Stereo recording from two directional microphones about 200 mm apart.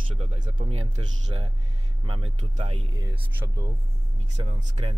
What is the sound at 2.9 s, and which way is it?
Speech, 15° right (ahead or behind).